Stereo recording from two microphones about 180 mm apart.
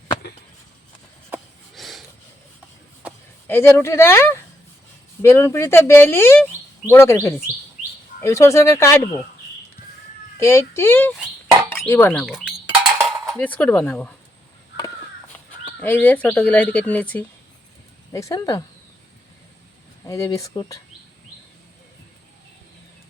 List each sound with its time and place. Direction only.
1.7 s a sound: centre (ahead or behind)
3.4 s speech: 15° left (ahead or behind)
10.3 s speech: 15° left (ahead or behind)
12.2 s bird: 5° right (ahead or behind)
13.3 s speech: 10° left (ahead or behind)
15.3 s crow: 5° left (ahead or behind)
15.8 s speech: 10° left (ahead or behind)
20.1 s speech: 15° left (ahead or behind)